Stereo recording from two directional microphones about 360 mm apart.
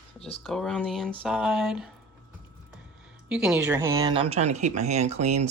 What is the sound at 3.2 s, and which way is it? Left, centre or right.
Speech, centre.